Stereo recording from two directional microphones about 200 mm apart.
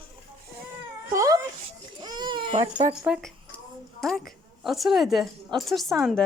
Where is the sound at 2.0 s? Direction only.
20° right (ahead or behind).